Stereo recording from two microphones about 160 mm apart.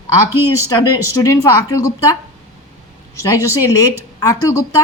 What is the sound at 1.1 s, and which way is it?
Speech, 20° left (ahead or behind).